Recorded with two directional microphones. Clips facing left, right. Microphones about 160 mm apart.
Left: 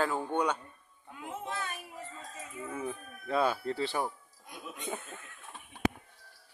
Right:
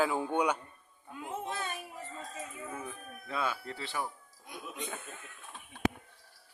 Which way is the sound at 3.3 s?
35° left (ahead or behind).